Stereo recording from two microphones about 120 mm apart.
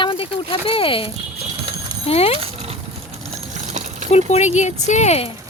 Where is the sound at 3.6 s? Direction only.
85° right.